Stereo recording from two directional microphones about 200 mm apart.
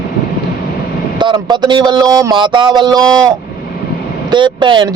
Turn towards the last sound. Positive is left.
turn(degrees=-20)  # may be behind; listen again after turning